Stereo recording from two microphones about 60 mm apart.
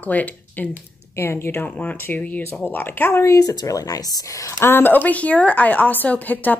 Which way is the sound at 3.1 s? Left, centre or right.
Left.